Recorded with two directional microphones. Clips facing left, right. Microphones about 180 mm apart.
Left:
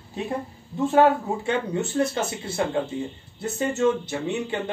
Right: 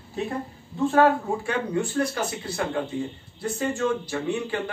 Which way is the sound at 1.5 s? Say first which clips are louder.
Left 2 dB; 25° left (ahead or behind).